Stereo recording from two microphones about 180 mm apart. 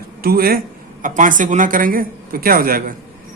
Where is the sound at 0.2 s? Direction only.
55° right (ahead or behind).